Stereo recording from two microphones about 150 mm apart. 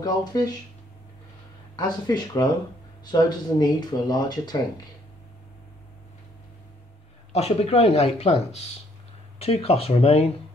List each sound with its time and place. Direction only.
0.0 s speech: 25° left (ahead or behind)
1.8 s speech: 30° left (ahead or behind)
7.3 s speech: 45° left (ahead or behind)